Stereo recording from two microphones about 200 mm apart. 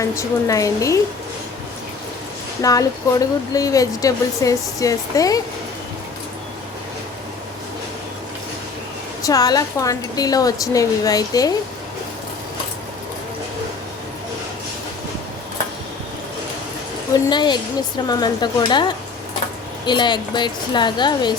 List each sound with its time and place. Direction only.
0.0 s speech: 15° left (ahead or behind)
2.6 s speech: 15° left (ahead or behind)
9.2 s speech: 20° left (ahead or behind)
17.2 s a woman's voice: 20° left (ahead or behind)